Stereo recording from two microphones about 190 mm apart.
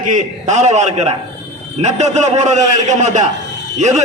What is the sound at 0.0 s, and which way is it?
A man's voice, 40° right (ahead or behind).